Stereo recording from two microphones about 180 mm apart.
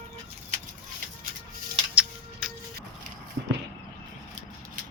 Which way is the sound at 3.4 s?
65° right (ahead or behind).